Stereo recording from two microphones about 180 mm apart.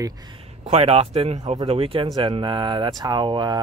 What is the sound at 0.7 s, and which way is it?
Speech, 35° right (ahead or behind).